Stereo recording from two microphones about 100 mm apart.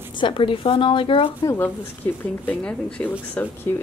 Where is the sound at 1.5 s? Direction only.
20° left (ahead or behind).